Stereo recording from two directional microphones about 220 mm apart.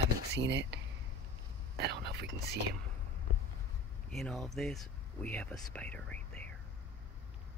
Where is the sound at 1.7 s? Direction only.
50° right (ahead or behind).